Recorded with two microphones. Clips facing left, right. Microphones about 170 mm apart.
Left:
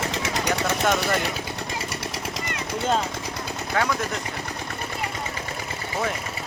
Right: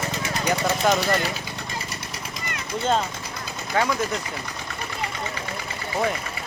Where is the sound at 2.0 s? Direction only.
80° left.